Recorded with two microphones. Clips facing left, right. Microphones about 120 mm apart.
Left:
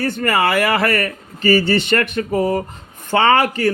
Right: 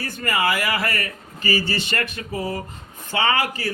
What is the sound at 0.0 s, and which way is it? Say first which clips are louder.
A man's voice: left 6 dB; 65° left (ahead or behind).